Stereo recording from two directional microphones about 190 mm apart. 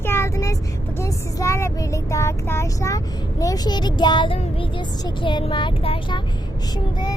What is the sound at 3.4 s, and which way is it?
Speech, 20° left (ahead or behind).